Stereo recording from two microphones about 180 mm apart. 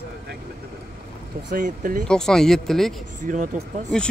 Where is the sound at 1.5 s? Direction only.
50° right (ahead or behind).